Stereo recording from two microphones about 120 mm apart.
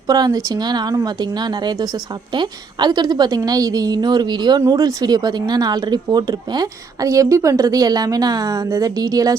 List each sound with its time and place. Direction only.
0.1 s speech: 30° right (ahead or behind)